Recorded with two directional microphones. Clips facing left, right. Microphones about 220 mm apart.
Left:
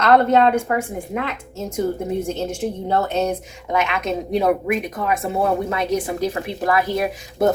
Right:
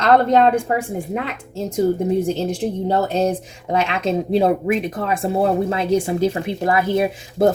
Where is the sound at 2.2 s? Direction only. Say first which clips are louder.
Right 3 dB; 35° right (ahead or behind).